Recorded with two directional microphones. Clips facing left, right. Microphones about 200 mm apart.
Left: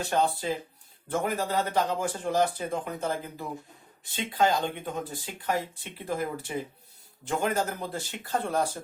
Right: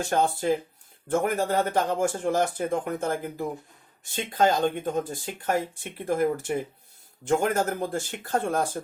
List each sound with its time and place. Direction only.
0.0 s speech: 50° right (ahead or behind)